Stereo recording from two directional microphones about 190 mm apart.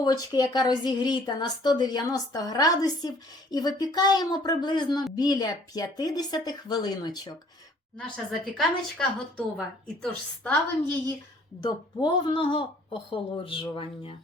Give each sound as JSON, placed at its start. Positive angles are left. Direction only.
{"t": 0.0, "sound": "a woman's voice", "side_deg": 20}
{"t": 7.9, "sound": "a woman's voice", "side_deg": 5}
{"t": 11.6, "sound": "a woman's voice", "side_deg": 25}